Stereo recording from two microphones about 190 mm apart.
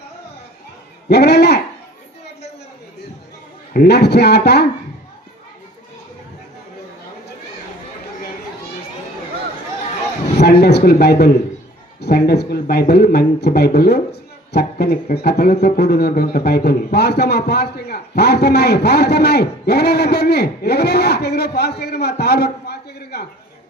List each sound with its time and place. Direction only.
1.1 s speech: 60° left (ahead or behind)
3.8 s speech: 60° left (ahead or behind)
10.3 s a man's voice: 60° left (ahead or behind)